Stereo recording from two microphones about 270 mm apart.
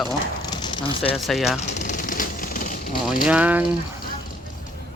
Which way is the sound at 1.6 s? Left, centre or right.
Left.